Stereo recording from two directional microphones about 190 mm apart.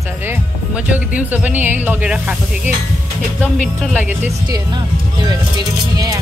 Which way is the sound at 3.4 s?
5° left (ahead or behind).